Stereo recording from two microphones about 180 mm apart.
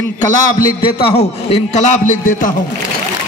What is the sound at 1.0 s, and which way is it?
Speech, 40° left (ahead or behind).